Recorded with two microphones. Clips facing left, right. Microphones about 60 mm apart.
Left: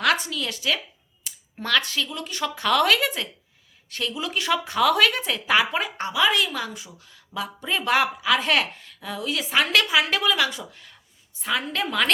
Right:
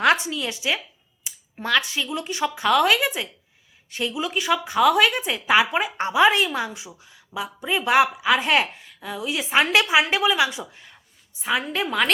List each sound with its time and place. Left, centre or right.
0.0 s a woman's voice: right
1.2 s a sound: centre
2.1 s a woman's voice: centre
2.6 s speech: centre
6.0 s a woman's voice: right
6.7 s speech: centre
9.4 s a woman's voice: right
11.4 s speech: centre